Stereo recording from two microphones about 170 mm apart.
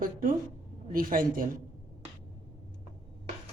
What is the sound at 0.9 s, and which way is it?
Speech, 55° right (ahead or behind).